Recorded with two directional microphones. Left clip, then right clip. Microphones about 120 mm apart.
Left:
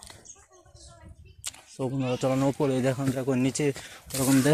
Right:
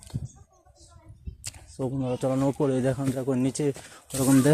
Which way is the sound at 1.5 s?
45° right (ahead or behind).